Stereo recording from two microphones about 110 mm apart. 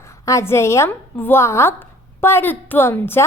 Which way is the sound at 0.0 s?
25° left (ahead or behind).